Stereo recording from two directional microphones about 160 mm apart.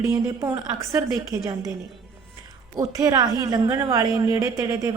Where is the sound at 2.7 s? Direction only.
20° right (ahead or behind).